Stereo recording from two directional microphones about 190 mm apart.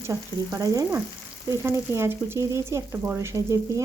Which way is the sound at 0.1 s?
15° right (ahead or behind).